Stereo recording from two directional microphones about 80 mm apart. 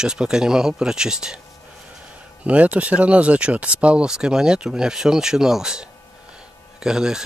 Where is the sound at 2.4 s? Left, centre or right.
Centre.